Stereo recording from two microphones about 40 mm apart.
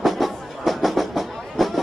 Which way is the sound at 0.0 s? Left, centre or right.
Centre.